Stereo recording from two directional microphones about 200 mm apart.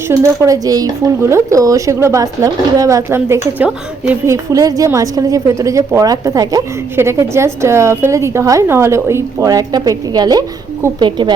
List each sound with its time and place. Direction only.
0.1 s a woman's voice: 15° right (ahead or behind)